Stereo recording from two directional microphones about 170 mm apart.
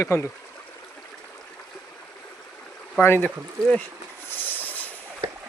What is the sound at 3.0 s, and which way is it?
Speech, 15° left (ahead or behind).